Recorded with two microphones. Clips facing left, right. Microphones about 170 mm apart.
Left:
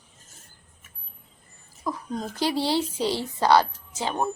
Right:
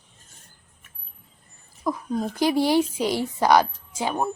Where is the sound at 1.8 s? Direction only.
5° right (ahead or behind).